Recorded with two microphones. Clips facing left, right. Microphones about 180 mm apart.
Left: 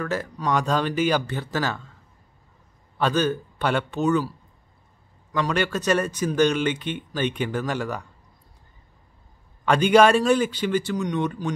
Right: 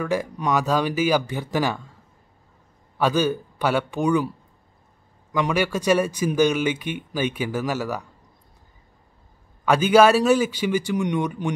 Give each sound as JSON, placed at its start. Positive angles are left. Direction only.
{"t": 0.0, "sound": "speech", "side_deg": -15}
{"t": 3.0, "sound": "speech", "side_deg": -10}
{"t": 5.3, "sound": "speech", "side_deg": -10}
{"t": 9.7, "sound": "speech", "side_deg": -5}
{"t": 11.4, "sound": "speech", "side_deg": -20}